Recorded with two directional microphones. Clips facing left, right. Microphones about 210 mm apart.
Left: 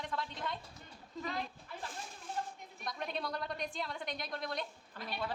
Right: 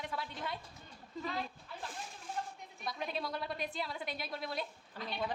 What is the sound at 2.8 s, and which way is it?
A woman's voice, 5° right (ahead or behind).